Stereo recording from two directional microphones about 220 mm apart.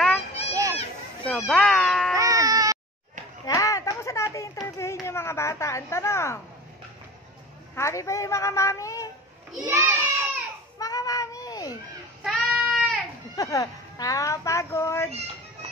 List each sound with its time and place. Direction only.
0.5 s children playing: 15° right (ahead or behind)
1.2 s a sound: 5° left (ahead or behind)
2.1 s baby cry: 15° right (ahead or behind)
3.4 s a sound: 15° left (ahead or behind)
4.6 s speech: 10° left (ahead or behind)
7.7 s a child's voice: 15° left (ahead or behind)
9.5 s a sound: 10° right (ahead or behind)
10.8 s cat: 15° left (ahead or behind)
12.2 s child singing: centre (ahead or behind)
13.4 s speech: 15° left (ahead or behind)